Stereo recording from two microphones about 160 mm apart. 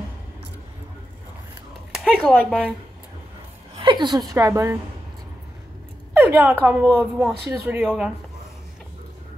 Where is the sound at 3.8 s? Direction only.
30° right (ahead or behind).